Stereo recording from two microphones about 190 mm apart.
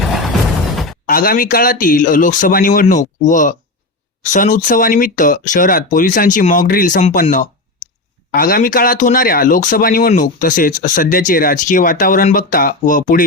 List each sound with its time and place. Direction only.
1.0 s speech: 50° left (ahead or behind)